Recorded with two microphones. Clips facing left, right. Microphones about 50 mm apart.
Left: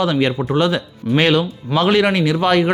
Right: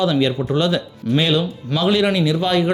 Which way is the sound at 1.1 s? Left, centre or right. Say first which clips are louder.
Left 3 dB; left.